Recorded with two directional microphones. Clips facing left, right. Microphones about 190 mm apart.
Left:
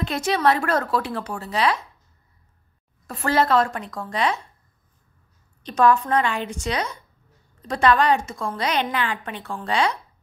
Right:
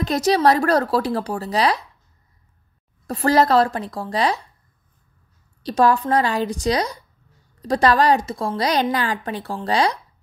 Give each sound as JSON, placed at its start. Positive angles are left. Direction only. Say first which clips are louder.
{"t": 0.0, "sound": "a woman's voice", "louder": "right 4 dB", "side_deg": -40}
{"t": 3.1, "sound": "a woman's voice", "louder": "right 4 dB", "side_deg": -40}
{"t": 5.6, "sound": "a woman's voice", "louder": "right 1 dB", "side_deg": -35}